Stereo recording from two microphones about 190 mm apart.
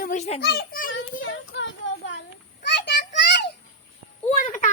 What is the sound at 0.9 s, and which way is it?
Child singing, 80° left.